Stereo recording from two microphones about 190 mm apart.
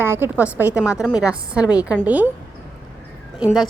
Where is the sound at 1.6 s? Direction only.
20° left (ahead or behind).